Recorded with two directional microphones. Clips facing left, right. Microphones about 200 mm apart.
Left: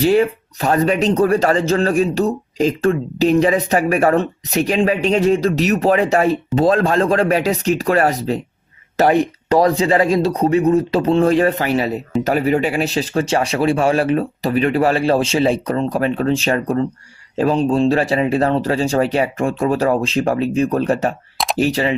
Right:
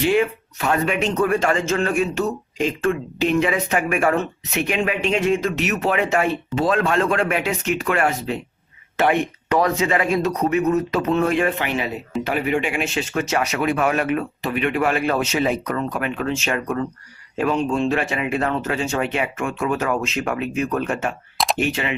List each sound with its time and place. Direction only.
0.0 s speech: 40° left (ahead or behind)
21.3 s a sound: centre (ahead or behind)
21.6 s speech: 35° left (ahead or behind)